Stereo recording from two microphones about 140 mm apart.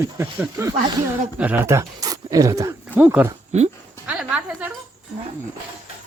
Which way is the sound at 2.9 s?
10° right (ahead or behind).